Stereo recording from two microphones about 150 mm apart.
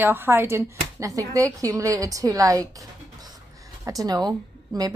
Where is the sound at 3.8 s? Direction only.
25° right (ahead or behind).